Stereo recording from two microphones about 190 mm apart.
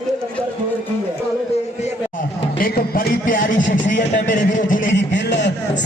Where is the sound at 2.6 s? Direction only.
50° left (ahead or behind).